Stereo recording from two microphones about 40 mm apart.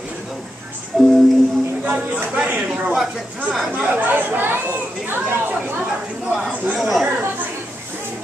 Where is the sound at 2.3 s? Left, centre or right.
Right.